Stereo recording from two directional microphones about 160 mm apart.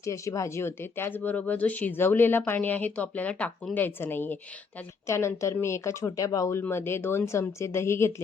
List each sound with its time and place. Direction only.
0.0 s speech: 20° left (ahead or behind)